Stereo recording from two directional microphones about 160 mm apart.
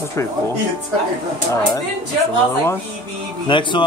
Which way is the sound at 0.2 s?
15° left (ahead or behind).